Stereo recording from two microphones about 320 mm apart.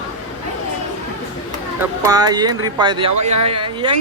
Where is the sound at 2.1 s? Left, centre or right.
Centre.